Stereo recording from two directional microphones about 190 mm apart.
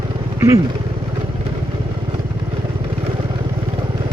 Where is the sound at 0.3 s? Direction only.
15° right (ahead or behind).